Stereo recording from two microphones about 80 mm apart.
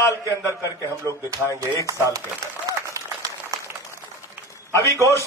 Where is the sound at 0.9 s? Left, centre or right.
Right.